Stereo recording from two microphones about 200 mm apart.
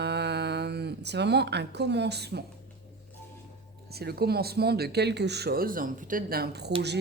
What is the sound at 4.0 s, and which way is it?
Speech, 50° right (ahead or behind).